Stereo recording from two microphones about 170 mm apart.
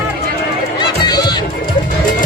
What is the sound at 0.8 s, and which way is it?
Music, 25° left (ahead or behind).